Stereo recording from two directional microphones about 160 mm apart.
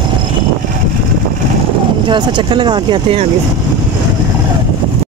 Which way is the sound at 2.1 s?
30° right (ahead or behind).